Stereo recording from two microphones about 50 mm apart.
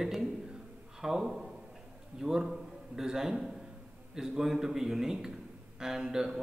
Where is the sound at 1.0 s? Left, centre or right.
Centre.